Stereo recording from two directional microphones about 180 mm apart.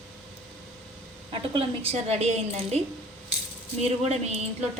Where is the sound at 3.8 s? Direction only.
35° right (ahead or behind).